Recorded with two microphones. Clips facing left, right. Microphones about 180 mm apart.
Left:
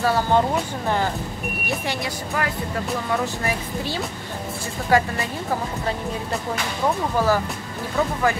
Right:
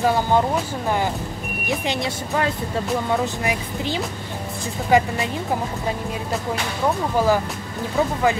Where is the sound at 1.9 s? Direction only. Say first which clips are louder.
Right 3 dB; 25° right (ahead or behind).